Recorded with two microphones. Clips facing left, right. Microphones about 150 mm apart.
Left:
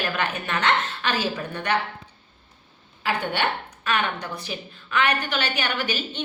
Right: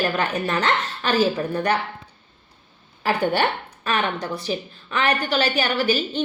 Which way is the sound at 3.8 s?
35° right (ahead or behind).